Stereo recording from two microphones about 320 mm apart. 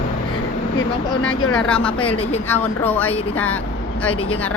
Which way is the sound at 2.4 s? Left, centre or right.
Centre.